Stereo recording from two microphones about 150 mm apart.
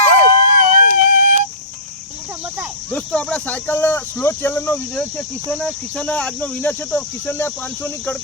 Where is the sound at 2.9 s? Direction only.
5° left (ahead or behind).